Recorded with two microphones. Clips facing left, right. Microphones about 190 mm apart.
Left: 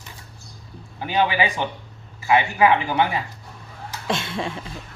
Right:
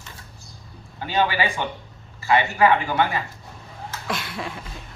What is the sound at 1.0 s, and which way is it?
Speech, 15° left (ahead or behind).